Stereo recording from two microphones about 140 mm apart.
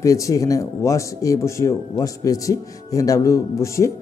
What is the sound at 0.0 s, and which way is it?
Speech, 25° left (ahead or behind).